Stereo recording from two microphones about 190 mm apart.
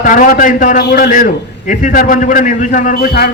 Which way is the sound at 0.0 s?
45° left (ahead or behind).